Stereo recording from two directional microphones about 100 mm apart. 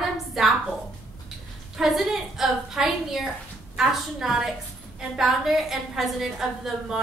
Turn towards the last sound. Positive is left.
turn(degrees=-5)  # may be behind; listen again after turning